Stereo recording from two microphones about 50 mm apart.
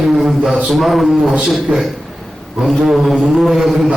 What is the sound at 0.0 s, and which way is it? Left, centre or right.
A man's voice, centre.